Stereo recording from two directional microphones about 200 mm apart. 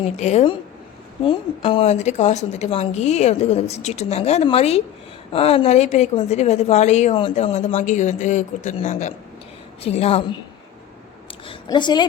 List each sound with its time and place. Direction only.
0.2 s a woman's voice: 35° left (ahead or behind)
11.4 s a woman's voice: 20° left (ahead or behind)